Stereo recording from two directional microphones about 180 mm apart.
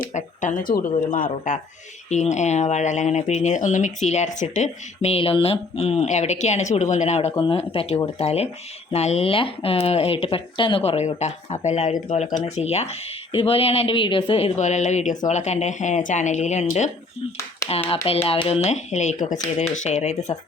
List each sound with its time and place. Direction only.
0.0 s a sound: 40° left (ahead or behind)
1.1 s speech: 50° left (ahead or behind)
2.0 s speech: 40° left (ahead or behind)
7.3 s speech: 25° left (ahead or behind)